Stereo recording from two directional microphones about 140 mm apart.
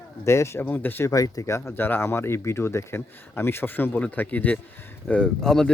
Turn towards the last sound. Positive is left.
turn(degrees=5)  # may be behind; listen again after turning